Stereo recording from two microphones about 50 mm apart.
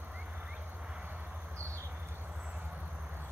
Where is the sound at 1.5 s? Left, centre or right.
Right.